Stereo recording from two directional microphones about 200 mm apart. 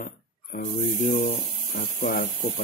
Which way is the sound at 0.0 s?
40° left (ahead or behind).